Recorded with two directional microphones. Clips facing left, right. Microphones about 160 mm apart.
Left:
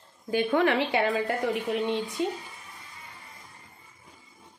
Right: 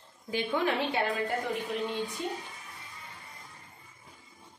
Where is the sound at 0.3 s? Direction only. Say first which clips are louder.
Left 6 dB; 60° left (ahead or behind); by 2.3 s 90° left.